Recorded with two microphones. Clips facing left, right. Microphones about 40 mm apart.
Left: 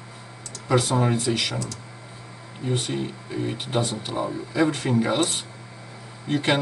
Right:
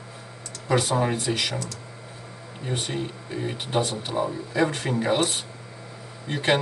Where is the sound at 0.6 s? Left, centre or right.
Centre.